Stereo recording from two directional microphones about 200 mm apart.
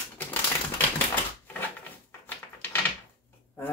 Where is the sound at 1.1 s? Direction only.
10° left (ahead or behind).